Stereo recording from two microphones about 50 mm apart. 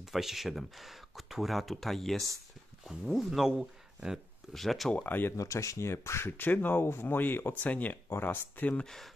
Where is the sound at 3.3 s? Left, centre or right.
Centre.